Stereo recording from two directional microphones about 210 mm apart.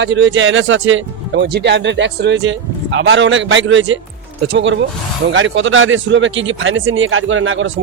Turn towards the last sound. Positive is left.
turn(degrees=-65)  # may be behind; listen again after turning